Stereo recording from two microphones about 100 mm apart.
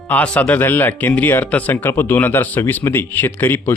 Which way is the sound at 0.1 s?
15° left (ahead or behind).